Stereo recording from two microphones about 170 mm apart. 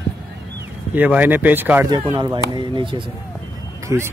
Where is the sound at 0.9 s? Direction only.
10° right (ahead or behind).